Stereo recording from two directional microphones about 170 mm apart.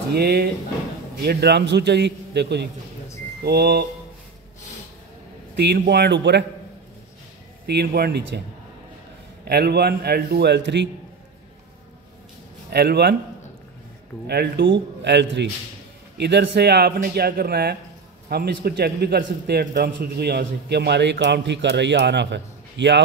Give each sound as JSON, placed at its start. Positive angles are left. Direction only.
{"t": 0.1, "sound": "a man's voice", "side_deg": -70}
{"t": 3.4, "sound": "speech", "side_deg": -70}
{"t": 5.6, "sound": "a man's voice", "side_deg": -75}
{"t": 7.6, "sound": "speech", "side_deg": -70}
{"t": 9.4, "sound": "speech", "side_deg": -70}
{"t": 12.6, "sound": "speech", "side_deg": -75}
{"t": 14.2, "sound": "a man's voice", "side_deg": -75}